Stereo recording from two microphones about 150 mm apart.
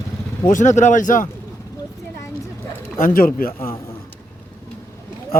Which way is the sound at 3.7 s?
15° left (ahead or behind).